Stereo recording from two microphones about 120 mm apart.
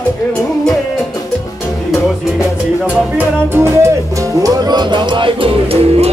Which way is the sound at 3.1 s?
20° right (ahead or behind).